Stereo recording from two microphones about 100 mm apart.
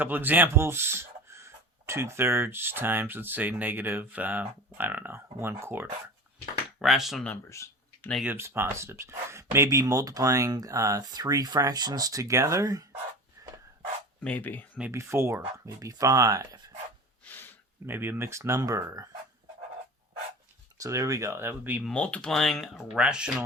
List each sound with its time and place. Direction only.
0.0 s speech: 20° right (ahead or behind)
6.7 s speech: 5° right (ahead or behind)
7.5 s a sound: 30° left (ahead or behind)
8.2 s speech: 20° right (ahead or behind); by 12.9 s 35° right (ahead or behind)
13.4 s a sound: 40° right (ahead or behind)
14.2 s speech: 15° left (ahead or behind)
14.9 s speech: 30° right (ahead or behind)
17.2 s a sound: 20° left (ahead or behind)
17.8 s speech: 20° right (ahead or behind)
20.7 s speech: 35° right (ahead or behind); by 21.8 s 20° right (ahead or behind)
21.8 s speech: 10° left (ahead or behind); by 23.3 s 10° right (ahead or behind)